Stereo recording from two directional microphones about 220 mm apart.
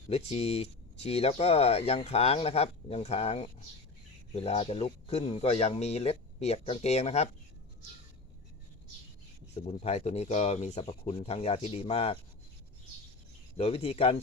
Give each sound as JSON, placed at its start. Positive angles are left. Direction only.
{"t": 0.1, "sound": "speech", "side_deg": 30}
{"t": 9.6, "sound": "speech", "side_deg": 30}
{"t": 13.6, "sound": "speech", "side_deg": 25}